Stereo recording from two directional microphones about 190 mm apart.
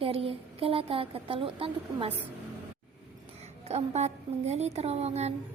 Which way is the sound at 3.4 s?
35° right (ahead or behind).